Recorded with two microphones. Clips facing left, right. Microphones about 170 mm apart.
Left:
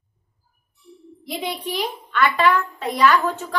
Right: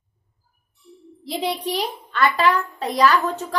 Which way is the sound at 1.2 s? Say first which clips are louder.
Right 3 dB; 35° right (ahead or behind).